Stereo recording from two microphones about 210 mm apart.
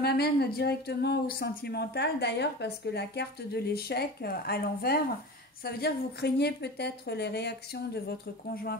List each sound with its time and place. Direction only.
0.0 s speech: 50° left (ahead or behind)